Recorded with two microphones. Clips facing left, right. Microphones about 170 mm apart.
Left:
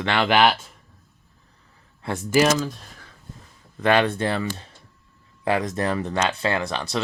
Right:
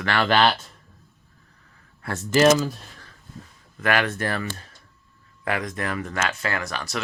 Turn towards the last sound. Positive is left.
turn(degrees=30)  # may be behind; listen again after turning